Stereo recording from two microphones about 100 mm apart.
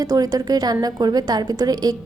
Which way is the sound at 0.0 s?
40° right (ahead or behind).